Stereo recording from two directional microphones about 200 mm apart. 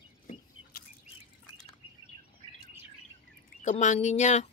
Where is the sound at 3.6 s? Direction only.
40° left (ahead or behind).